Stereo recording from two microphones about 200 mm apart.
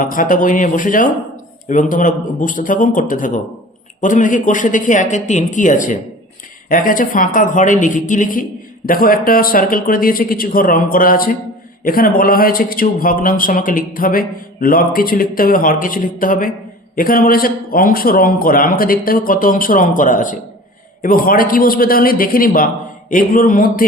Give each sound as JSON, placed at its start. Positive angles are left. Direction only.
{"t": 0.0, "sound": "speech", "side_deg": 45}